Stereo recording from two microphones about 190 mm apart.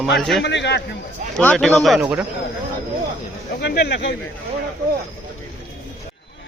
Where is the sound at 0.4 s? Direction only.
60° left (ahead or behind).